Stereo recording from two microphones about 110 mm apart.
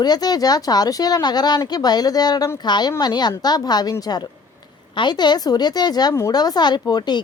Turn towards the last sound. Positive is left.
turn(degrees=40)  # may be behind; listen again after turning